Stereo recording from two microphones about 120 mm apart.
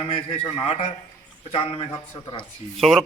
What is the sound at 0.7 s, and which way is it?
Speech, 55° left (ahead or behind).